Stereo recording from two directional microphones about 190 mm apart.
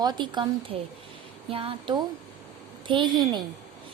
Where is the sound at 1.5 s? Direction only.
30° right (ahead or behind).